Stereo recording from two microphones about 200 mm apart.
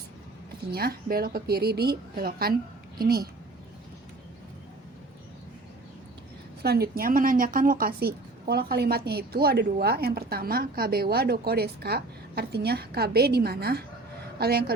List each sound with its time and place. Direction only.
0.7 s speech: 50° right (ahead or behind)
6.6 s speech: 50° right (ahead or behind)